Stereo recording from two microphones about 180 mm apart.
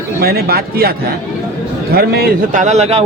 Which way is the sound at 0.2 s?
60° right (ahead or behind).